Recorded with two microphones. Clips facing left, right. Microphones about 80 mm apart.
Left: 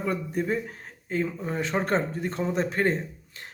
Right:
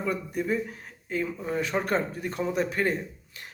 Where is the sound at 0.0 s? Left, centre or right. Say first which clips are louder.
Left 1 dB; left.